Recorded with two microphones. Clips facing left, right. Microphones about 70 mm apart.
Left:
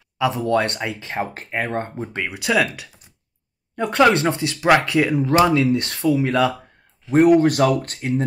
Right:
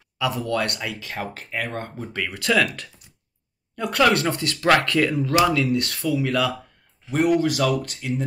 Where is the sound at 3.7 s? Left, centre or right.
Left.